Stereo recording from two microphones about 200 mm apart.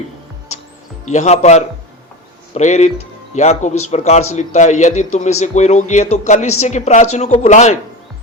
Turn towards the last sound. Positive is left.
turn(degrees=35)  # may be behind; listen again after turning